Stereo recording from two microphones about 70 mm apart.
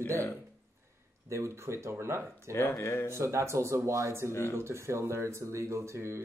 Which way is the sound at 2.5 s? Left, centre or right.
Left.